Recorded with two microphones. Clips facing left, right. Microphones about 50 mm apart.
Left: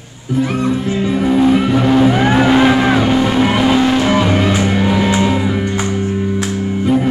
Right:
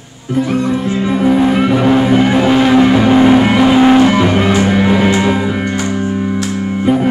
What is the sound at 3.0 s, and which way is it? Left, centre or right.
Music, right.